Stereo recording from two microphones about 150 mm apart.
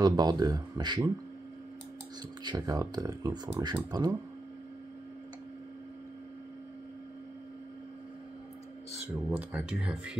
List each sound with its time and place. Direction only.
0.0 s speech: 25° right (ahead or behind)
2.4 s speech: 25° right (ahead or behind)
9.1 s speech: 10° right (ahead or behind)